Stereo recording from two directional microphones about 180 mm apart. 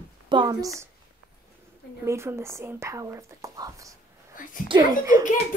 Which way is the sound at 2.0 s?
15° right (ahead or behind).